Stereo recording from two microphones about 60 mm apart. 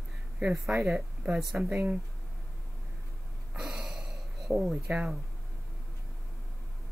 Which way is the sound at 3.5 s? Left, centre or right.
Centre.